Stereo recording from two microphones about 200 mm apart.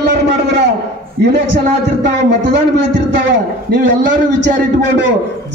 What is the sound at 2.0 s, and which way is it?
A man's voice, 60° right (ahead or behind).